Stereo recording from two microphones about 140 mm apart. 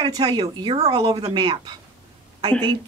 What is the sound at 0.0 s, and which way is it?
Speech, 30° right (ahead or behind).